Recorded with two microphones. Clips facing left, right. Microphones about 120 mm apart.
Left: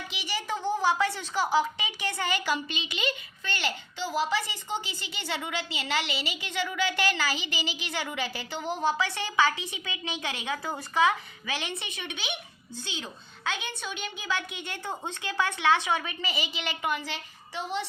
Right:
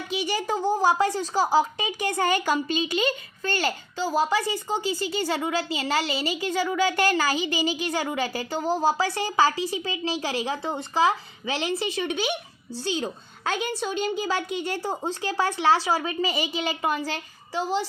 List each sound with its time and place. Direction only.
0.2 s a woman's voice: 45° right (ahead or behind)